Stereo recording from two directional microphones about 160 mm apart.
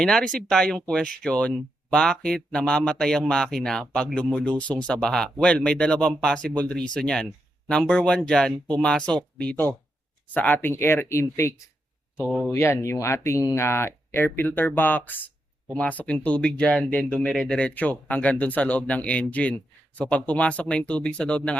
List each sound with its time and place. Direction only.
0.0 s speech: 5° left (ahead or behind)
12.2 s speech: centre (ahead or behind)
12.5 s speech: 15° left (ahead or behind)